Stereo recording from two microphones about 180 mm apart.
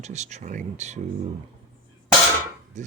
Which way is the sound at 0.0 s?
40° right (ahead or behind).